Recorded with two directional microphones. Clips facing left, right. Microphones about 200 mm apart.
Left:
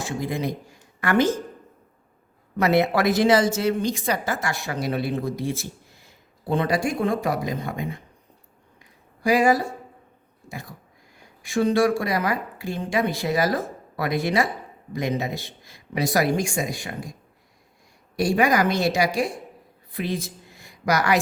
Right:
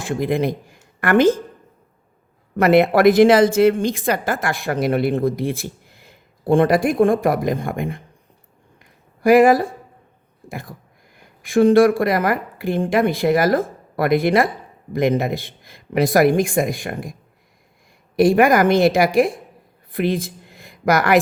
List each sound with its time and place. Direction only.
0.1 s a woman's voice: 55° right (ahead or behind)
2.6 s a woman's voice: 55° right (ahead or behind)
9.2 s speech: 55° right (ahead or behind)
11.4 s a woman's voice: 55° right (ahead or behind)
18.2 s a woman's voice: 55° right (ahead or behind)